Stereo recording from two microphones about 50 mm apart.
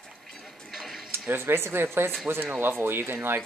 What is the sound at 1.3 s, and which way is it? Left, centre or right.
Speech, right.